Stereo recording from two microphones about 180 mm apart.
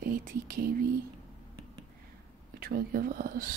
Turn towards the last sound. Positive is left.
turn(degrees=-50)  # may be behind; listen again after turning